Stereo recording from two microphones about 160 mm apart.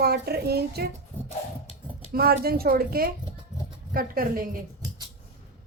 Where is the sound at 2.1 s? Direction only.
70° right (ahead or behind).